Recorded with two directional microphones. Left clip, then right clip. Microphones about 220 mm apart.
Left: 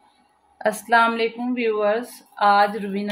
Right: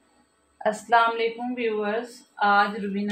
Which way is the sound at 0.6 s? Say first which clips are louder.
Left 3 dB; 50° left (ahead or behind).